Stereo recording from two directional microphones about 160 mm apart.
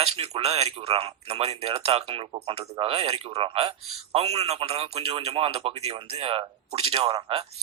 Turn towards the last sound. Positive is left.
turn(degrees=-35)  # may be behind; listen again after turning